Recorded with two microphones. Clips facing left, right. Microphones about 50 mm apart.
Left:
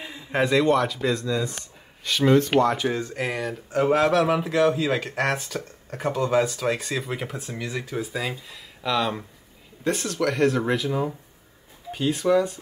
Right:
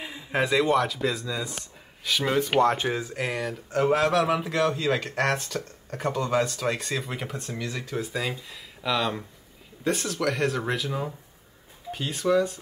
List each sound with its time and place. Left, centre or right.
0.0 s speech: centre
2.6 s speech: right
2.9 s speech: centre